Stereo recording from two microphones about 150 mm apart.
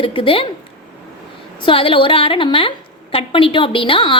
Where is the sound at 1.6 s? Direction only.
35° left (ahead or behind).